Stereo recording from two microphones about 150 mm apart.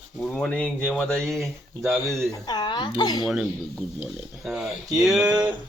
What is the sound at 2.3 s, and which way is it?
Speech, 30° left (ahead or behind).